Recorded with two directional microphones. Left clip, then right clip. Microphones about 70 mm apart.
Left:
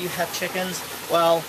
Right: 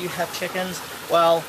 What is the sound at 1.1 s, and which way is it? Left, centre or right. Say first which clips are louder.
Speech: right 2 dB; right.